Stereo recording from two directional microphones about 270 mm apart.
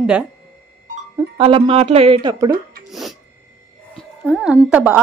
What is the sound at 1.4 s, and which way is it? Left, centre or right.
Speech, centre.